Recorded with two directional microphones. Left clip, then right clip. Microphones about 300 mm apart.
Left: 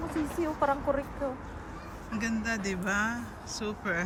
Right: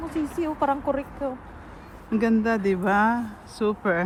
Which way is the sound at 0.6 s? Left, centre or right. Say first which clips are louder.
Right 4 dB; right.